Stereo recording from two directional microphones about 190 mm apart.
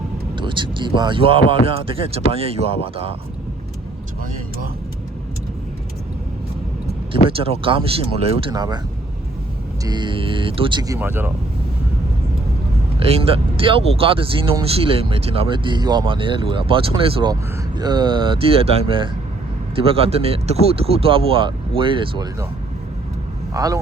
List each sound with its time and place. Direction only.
0.3 s speech: 25° right (ahead or behind)
7.3 s speech: 30° right (ahead or behind)
9.8 s speech: 25° right (ahead or behind)
13.0 s speech: 30° right (ahead or behind)
23.6 s speech: 20° right (ahead or behind)